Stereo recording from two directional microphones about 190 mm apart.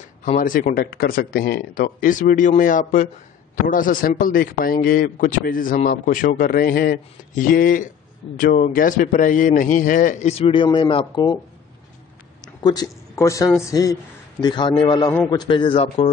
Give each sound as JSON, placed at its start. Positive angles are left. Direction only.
{"t": 0.2, "sound": "a man's voice", "side_deg": 45}
{"t": 12.6, "sound": "a man's voice", "side_deg": 20}